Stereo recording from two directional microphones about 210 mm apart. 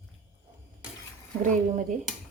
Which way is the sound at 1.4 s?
35° right (ahead or behind).